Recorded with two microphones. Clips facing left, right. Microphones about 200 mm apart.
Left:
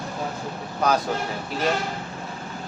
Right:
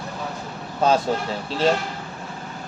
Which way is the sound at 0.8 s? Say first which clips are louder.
Right 3 dB; 25° right (ahead or behind).